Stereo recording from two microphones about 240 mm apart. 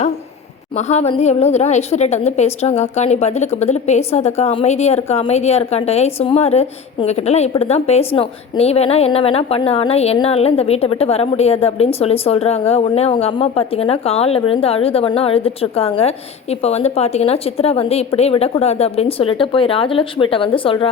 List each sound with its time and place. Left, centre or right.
0.8 s a woman's voice: left